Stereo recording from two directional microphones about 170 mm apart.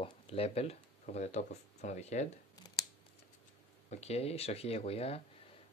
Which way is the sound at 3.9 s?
40° left (ahead or behind).